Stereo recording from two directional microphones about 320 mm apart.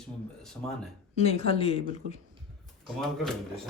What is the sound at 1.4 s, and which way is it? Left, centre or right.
Speech, centre.